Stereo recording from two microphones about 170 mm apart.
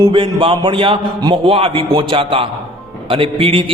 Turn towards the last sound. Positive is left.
turn(degrees=-30)  # may be behind; listen again after turning